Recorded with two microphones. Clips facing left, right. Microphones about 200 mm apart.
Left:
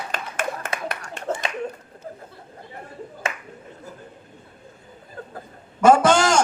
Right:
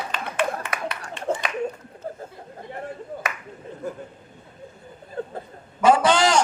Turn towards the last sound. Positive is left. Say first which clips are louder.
# left 2 dB
turn(degrees=45)  # may be behind; listen again after turning